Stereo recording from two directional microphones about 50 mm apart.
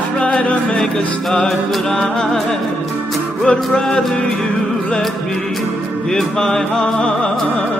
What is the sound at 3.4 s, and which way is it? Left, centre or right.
Music, centre.